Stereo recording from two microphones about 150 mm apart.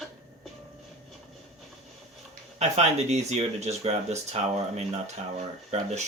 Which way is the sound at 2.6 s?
45° right (ahead or behind).